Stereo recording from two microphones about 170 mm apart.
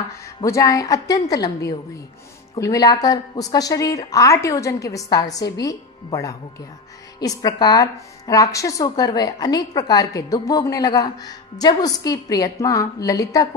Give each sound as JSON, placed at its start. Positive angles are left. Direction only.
{"t": 0.1, "sound": "a woman's voice", "side_deg": 20}
{"t": 2.5, "sound": "a woman's voice", "side_deg": 20}